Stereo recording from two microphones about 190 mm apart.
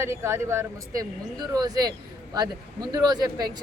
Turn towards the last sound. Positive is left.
turn(degrees=-20)  # may be behind; listen again after turning